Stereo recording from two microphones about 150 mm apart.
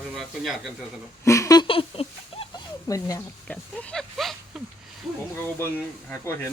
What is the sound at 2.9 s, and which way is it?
Speech, 20° left (ahead or behind).